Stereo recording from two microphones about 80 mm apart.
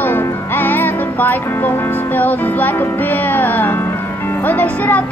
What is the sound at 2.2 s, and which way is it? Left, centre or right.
Music, left.